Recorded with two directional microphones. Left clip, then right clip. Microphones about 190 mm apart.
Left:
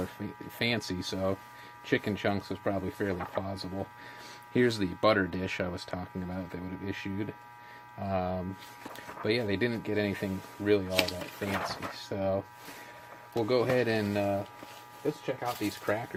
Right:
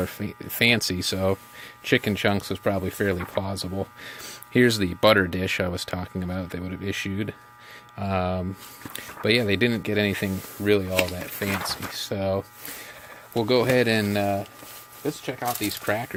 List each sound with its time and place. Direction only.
0.0 s speech: 45° right (ahead or behind)
15.4 s speech: 55° right (ahead or behind)